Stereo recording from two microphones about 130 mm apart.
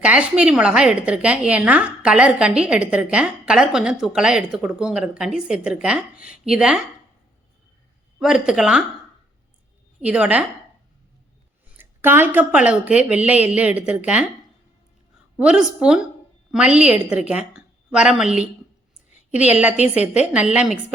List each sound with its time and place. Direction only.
0.0 s a woman's voice: 10° right (ahead or behind)
8.2 s a woman's voice: 5° right (ahead or behind)
10.0 s a woman's voice: 10° right (ahead or behind)
11.8 s a woman's voice: 15° right (ahead or behind)
15.4 s a woman's voice: 5° right (ahead or behind)
19.1 s a sound: 60° left (ahead or behind)
19.5 s a woman's voice: 10° right (ahead or behind)